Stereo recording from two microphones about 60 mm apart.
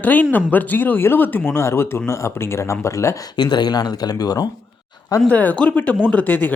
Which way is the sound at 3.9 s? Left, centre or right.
Left.